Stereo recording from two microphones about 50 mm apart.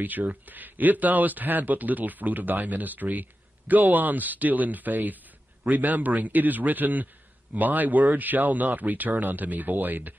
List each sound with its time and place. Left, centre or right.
0.0 s speech: right